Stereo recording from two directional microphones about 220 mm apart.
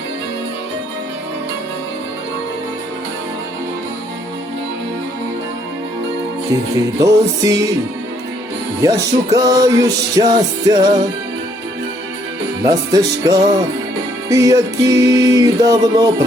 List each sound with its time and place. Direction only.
6.5 s music: 15° right (ahead or behind)
8.8 s music: 15° right (ahead or behind)
12.6 s music: 15° right (ahead or behind)